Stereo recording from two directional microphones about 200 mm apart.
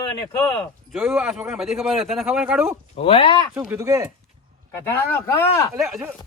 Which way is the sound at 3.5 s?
10° right (ahead or behind).